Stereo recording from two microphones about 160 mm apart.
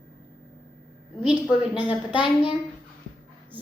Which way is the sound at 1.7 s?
10° right (ahead or behind).